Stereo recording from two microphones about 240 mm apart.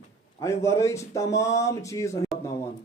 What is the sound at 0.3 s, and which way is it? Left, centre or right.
A man's voice, centre.